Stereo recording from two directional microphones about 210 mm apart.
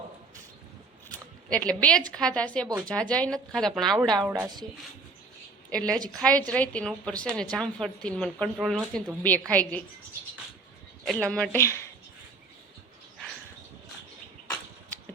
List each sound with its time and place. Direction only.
1.1 s a sound: 5° left (ahead or behind)
2.1 s a woman's voice: 5° left (ahead or behind)
4.3 s speech: 15° right (ahead or behind)
5.7 s a woman's voice: 5° left (ahead or behind)
11.0 s a woman's voice: 5° left (ahead or behind)